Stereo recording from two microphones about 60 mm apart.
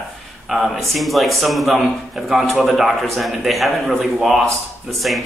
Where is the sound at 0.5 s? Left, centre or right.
Centre.